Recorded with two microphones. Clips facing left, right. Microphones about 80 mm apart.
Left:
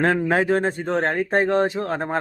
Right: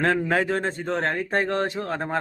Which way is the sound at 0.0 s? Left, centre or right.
Centre.